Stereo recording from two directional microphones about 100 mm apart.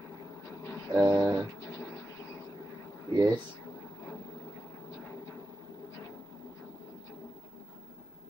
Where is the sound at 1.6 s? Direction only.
30° left (ahead or behind).